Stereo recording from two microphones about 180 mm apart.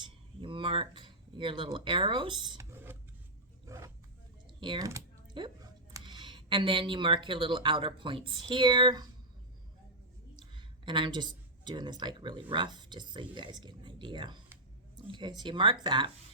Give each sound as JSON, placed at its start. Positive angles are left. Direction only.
{"t": 0.0, "sound": "speech", "side_deg": -30}
{"t": 2.5, "sound": "a sound", "side_deg": -15}
{"t": 3.7, "sound": "roaring cats", "side_deg": -15}
{"t": 4.4, "sound": "typing", "side_deg": -25}
{"t": 4.9, "sound": "a sound", "side_deg": -20}
{"t": 5.9, "sound": "speech", "side_deg": -25}
{"t": 10.3, "sound": "speech", "side_deg": -25}